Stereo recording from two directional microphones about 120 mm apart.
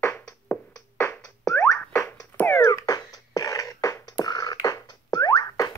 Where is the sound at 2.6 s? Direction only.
30° left (ahead or behind).